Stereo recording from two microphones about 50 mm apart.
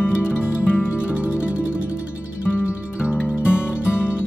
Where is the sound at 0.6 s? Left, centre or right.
Left.